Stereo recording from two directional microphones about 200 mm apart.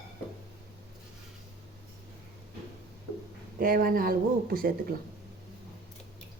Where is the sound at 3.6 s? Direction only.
45° right (ahead or behind).